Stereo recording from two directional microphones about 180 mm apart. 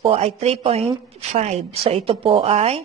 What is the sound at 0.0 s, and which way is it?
A woman's voice, 35° right (ahead or behind).